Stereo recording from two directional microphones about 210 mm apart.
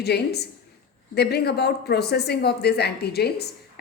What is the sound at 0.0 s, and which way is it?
Speech, 50° left (ahead or behind).